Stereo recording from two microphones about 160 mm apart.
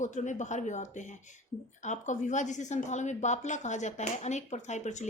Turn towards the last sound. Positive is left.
turn(degrees=45)  # may be behind; listen again after turning